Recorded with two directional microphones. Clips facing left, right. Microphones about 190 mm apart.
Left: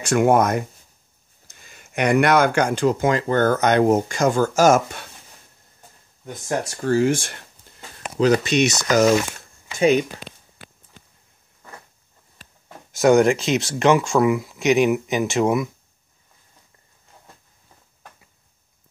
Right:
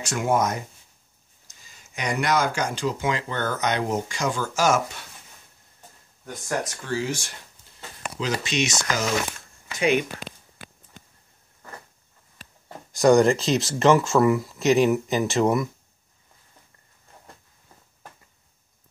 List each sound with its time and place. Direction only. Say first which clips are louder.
0.0 s speech: left 7 dB; 60° left (ahead or behind)
6.2 s speech: left 3 dB; 30° left (ahead or behind)
6.8 s speech: left 9 dB; 50° left (ahead or behind)
9.7 s speech: left 5 dB; 30° left (ahead or behind)
12.9 s speech: left 2 dB; centre (ahead or behind)